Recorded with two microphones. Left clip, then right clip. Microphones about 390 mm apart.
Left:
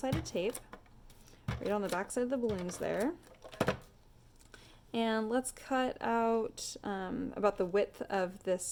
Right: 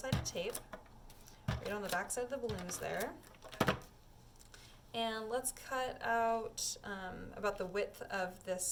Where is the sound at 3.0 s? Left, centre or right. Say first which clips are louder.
Left 6 dB; centre.